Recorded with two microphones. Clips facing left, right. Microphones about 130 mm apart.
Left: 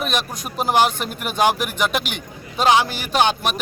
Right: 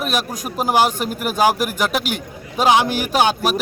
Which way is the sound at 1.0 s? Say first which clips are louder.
Right 4 dB; 45° right (ahead or behind).